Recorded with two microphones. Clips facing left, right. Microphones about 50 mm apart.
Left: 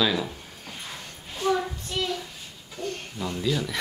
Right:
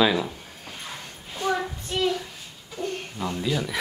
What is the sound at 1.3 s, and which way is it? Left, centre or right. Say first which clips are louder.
Child singing: left 1 dB; centre.